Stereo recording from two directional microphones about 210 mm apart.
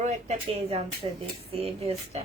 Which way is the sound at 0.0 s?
35° right (ahead or behind).